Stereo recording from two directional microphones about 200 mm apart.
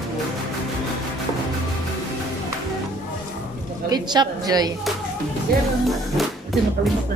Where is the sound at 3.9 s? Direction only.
20° right (ahead or behind).